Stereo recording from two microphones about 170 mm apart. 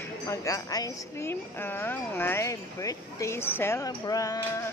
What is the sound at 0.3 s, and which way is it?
A woman's voice, 20° left (ahead or behind).